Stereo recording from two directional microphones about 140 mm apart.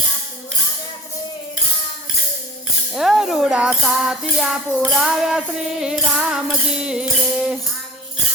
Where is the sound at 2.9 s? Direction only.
Centre (ahead or behind).